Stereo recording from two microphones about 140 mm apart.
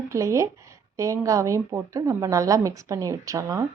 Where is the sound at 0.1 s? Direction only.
20° right (ahead or behind).